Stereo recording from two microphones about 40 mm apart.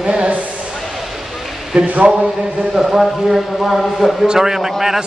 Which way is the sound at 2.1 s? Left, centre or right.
Right.